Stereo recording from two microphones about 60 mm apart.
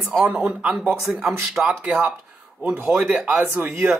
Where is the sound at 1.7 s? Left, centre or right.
Centre.